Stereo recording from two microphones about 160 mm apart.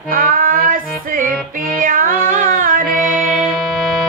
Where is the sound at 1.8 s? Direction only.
60° right (ahead or behind).